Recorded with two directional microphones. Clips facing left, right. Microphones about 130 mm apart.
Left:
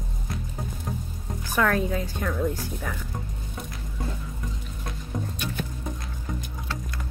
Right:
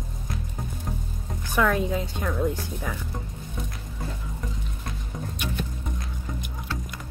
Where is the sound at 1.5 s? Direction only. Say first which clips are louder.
Right 1 dB; 15° right (ahead or behind).